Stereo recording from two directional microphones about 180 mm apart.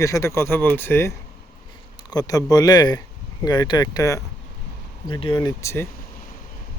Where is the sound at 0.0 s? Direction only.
15° left (ahead or behind).